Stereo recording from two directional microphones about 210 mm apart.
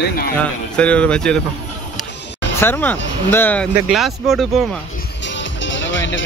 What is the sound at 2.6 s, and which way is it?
Speech, 10° left (ahead or behind).